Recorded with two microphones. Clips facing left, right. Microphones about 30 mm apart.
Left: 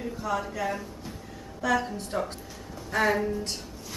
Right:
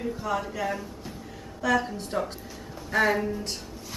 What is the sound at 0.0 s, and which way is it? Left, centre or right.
A woman's voice, centre.